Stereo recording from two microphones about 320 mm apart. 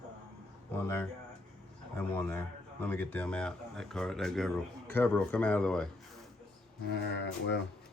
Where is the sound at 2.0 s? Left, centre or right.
Centre.